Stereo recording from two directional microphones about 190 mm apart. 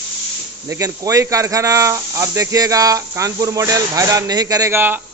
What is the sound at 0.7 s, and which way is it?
Speech, 15° right (ahead or behind).